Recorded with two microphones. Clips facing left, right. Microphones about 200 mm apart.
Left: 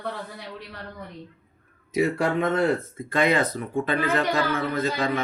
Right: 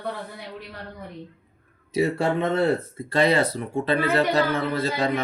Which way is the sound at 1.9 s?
30° right (ahead or behind).